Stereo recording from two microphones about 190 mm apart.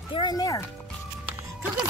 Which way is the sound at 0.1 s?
20° left (ahead or behind).